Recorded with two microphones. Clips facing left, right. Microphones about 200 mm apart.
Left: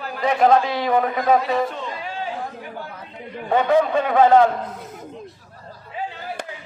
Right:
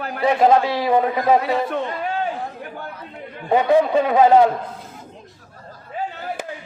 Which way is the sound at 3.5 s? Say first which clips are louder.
Right 2 dB; 15° right (ahead or behind).